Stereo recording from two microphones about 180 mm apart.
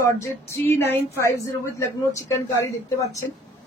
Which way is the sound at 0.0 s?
15° left (ahead or behind).